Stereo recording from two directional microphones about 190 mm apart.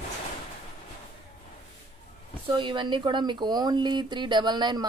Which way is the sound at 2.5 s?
25° right (ahead or behind).